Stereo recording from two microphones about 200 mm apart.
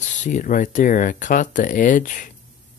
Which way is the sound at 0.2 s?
40° left (ahead or behind).